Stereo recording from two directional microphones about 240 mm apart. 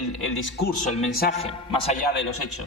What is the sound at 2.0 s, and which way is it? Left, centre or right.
Speech, left.